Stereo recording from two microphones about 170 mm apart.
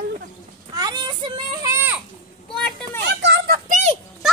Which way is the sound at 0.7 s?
25° right (ahead or behind).